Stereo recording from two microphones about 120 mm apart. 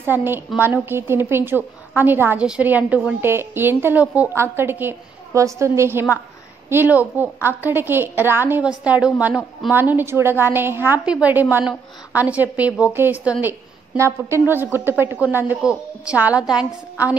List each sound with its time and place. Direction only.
0.0 s a woman's voice: 15° right (ahead or behind)